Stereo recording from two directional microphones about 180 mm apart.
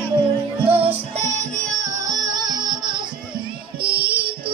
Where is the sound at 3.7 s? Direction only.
60° right (ahead or behind).